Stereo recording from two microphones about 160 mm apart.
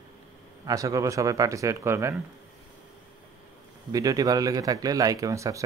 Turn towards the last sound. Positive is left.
turn(degrees=-20)  # may be behind; listen again after turning